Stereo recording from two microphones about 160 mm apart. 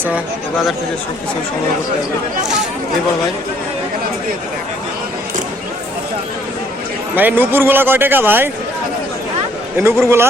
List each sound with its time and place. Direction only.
7.2 s a man's voice: 10° right (ahead or behind)
10.0 s a man's voice: 15° right (ahead or behind)